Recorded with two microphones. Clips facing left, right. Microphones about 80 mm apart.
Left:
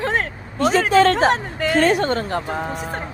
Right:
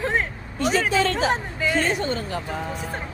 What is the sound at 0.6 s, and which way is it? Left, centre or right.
Speech, left.